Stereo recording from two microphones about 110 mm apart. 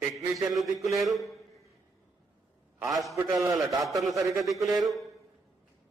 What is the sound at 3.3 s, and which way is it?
Speech, 35° right (ahead or behind).